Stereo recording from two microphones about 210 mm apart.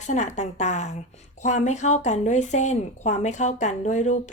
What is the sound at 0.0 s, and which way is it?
A woman's voice, 35° left (ahead or behind).